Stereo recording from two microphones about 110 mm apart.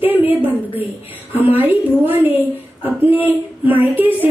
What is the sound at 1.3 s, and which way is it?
A woman's voice, 15° right (ahead or behind).